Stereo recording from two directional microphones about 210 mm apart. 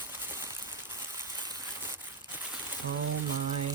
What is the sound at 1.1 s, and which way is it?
Trickle, 15° right (ahead or behind).